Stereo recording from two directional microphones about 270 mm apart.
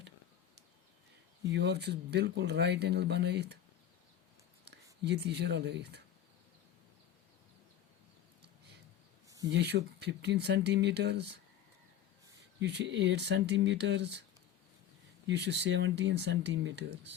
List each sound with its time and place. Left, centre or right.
1.5 s speech: right
4.6 s speech: right
9.5 s speech: right
12.5 s speech: right
15.3 s speech: right